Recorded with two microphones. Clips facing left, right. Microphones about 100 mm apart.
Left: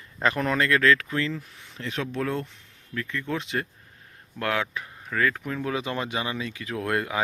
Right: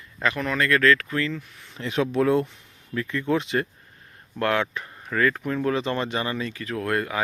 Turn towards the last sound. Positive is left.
turn(degrees=15)  # may be behind; listen again after turning